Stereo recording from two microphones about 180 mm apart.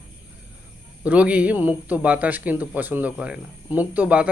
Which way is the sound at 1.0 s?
10° right (ahead or behind).